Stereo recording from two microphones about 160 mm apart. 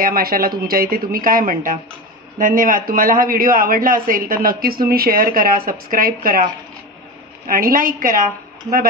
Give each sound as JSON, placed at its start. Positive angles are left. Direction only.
{"t": 0.0, "sound": "a man's voice", "side_deg": -70}